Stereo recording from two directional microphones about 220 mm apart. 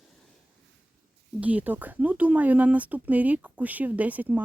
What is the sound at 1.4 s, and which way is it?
Speech, 5° right (ahead or behind).